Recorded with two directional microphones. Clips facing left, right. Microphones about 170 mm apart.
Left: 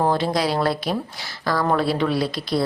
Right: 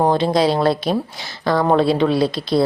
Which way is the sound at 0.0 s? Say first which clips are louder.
Right 5 dB; 20° right (ahead or behind).